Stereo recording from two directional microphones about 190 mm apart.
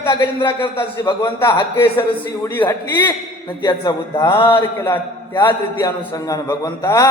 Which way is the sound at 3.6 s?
25° left (ahead or behind).